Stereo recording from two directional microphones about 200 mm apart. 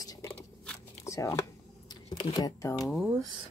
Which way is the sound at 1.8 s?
25° left (ahead or behind).